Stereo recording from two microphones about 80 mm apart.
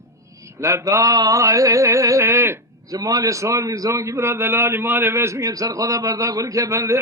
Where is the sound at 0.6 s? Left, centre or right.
Right.